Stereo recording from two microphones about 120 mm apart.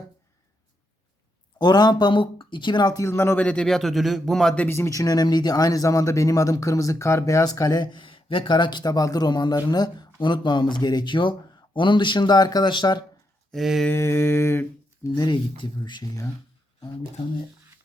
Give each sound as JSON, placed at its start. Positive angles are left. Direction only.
{"t": 1.5, "sound": "speech", "side_deg": 35}
{"t": 13.5, "sound": "speech", "side_deg": 0}
{"t": 13.8, "sound": "humming", "side_deg": 20}
{"t": 15.1, "sound": "speech", "side_deg": 35}